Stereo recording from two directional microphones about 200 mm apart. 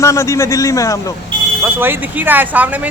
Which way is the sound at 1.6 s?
10° right (ahead or behind).